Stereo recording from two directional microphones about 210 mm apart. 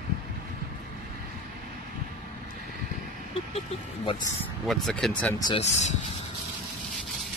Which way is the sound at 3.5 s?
25° left (ahead or behind).